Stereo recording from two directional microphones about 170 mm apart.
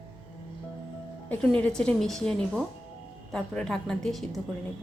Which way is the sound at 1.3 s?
10° left (ahead or behind).